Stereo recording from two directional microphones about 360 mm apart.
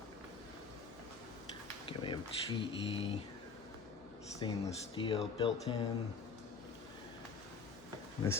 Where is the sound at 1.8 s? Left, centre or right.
Centre.